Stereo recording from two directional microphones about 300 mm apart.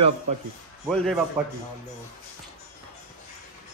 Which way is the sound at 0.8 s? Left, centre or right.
Centre.